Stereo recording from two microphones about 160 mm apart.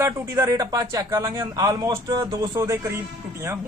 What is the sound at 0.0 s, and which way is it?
Speech, 20° right (ahead or behind).